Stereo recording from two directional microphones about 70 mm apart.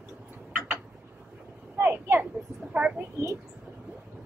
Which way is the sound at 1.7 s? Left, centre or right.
Right.